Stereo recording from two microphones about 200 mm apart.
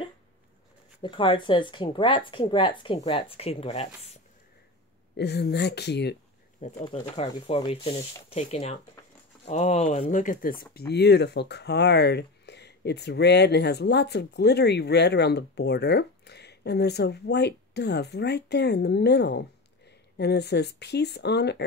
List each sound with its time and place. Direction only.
1.0 s speech: 25° left (ahead or behind)
5.1 s speech: 55° left (ahead or behind)
6.6 s speech: 30° left (ahead or behind); by 21.6 s 55° left (ahead or behind)